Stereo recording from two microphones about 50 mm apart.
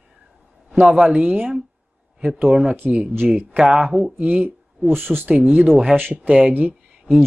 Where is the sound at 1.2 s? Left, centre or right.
Right.